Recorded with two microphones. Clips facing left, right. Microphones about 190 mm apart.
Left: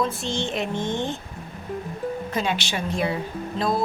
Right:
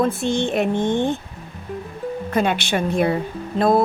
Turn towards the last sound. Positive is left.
turn(degrees=-55)  # may be behind; listen again after turning